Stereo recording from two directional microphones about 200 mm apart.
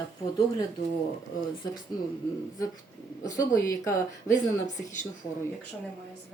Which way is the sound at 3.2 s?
15° left (ahead or behind).